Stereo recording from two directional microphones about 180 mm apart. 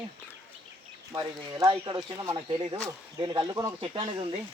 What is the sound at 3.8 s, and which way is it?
Speech, 30° right (ahead or behind).